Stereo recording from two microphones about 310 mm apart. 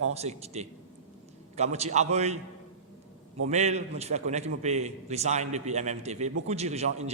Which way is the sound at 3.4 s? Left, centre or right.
Right.